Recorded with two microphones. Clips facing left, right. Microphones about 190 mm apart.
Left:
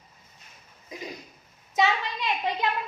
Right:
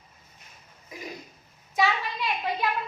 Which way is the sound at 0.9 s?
20° left (ahead or behind).